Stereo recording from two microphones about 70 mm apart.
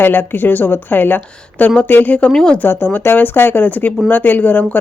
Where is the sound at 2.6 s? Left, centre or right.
Left.